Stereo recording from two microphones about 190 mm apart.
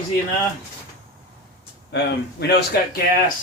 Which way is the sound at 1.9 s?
60° left (ahead or behind).